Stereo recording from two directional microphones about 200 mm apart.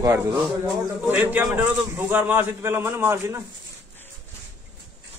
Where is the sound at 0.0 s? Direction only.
15° right (ahead or behind).